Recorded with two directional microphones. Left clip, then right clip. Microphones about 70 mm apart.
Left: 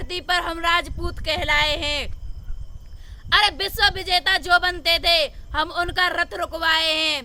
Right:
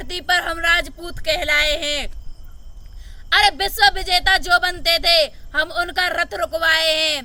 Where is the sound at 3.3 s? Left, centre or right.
Left.